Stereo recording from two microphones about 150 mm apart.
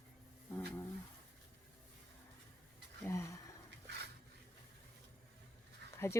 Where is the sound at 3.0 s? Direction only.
20° left (ahead or behind).